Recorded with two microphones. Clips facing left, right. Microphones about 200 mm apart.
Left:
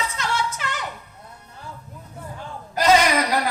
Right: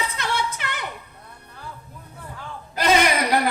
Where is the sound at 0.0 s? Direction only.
60° right (ahead or behind).